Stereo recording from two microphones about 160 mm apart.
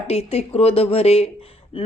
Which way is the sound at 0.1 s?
40° left (ahead or behind).